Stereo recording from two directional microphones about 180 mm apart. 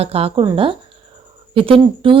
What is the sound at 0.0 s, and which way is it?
A woman's voice, 35° right (ahead or behind).